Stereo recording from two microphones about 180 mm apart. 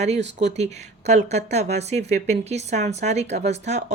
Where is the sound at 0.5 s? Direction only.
40° right (ahead or behind).